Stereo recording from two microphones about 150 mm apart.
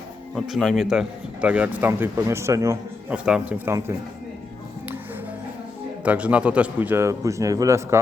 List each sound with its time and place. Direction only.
0.3 s speech: centre (ahead or behind); by 2.7 s 20° right (ahead or behind)
3.1 s speech: 5° right (ahead or behind)
6.1 s speech: 10° right (ahead or behind)